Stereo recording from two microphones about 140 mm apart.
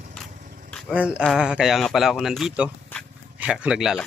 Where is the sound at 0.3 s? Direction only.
65° right (ahead or behind).